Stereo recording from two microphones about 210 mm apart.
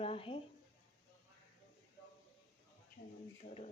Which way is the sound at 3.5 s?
30° left (ahead or behind).